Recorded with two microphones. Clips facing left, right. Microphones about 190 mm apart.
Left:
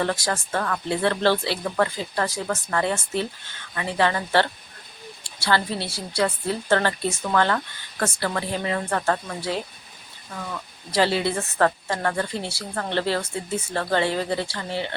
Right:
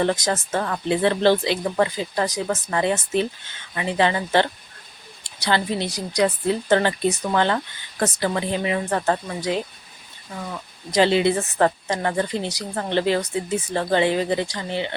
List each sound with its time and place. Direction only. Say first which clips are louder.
0.0 s a woman's voice: right 3 dB; 20° right (ahead or behind)